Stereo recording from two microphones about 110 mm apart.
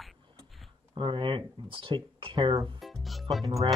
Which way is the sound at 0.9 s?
50° right (ahead or behind).